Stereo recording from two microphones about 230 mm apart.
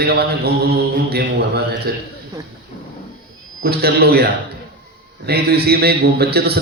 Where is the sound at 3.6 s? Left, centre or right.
Right.